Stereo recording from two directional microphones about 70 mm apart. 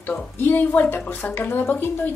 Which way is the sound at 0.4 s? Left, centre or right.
Left.